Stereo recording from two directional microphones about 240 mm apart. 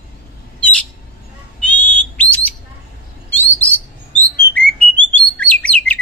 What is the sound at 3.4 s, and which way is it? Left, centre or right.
Bird, centre.